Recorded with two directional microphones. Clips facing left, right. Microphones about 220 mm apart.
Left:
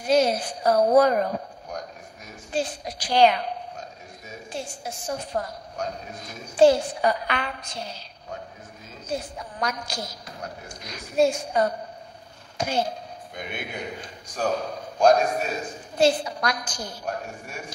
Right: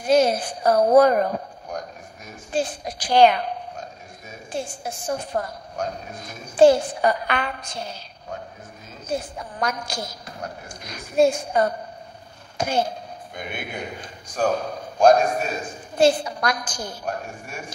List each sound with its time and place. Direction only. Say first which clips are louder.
0.0 s a woman's voice: right 2 dB; 50° right (ahead or behind)
9.0 s a man's voice: right 3 dB; 50° right (ahead or behind)